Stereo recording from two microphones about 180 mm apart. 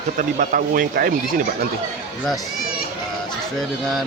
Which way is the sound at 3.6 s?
Centre (ahead or behind).